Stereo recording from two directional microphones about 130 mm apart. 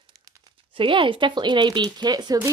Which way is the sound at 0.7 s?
40° right (ahead or behind).